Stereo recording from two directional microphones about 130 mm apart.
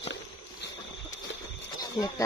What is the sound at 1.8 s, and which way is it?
Speech, 30° left (ahead or behind).